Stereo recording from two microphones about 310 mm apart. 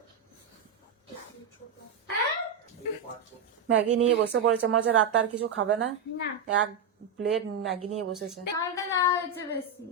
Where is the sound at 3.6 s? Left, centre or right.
Right.